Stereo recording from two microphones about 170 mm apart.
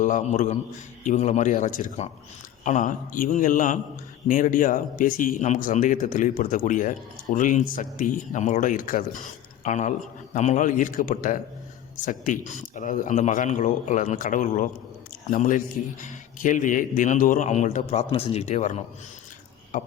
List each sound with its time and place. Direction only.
0.0 s a man's voice: 45° left (ahead or behind)
18.1 s speech: 35° left (ahead or behind)